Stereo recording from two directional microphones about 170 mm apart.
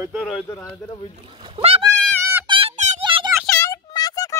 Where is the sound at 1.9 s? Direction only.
5° left (ahead or behind).